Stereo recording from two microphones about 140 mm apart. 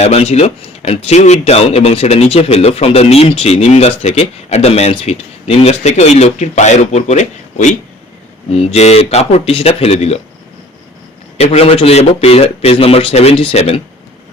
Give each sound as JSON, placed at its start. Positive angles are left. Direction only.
{"t": 0.0, "sound": "a man's voice", "side_deg": 50}
{"t": 8.5, "sound": "a man's voice", "side_deg": 50}
{"t": 11.3, "sound": "a man's voice", "side_deg": 45}